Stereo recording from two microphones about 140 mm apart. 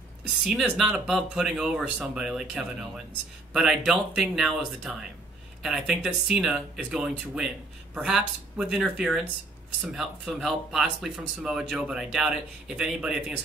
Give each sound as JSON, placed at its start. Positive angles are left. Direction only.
{"t": 0.4, "sound": "speech", "side_deg": -5}